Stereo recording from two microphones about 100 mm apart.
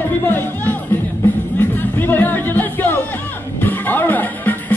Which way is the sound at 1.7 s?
20° left (ahead or behind).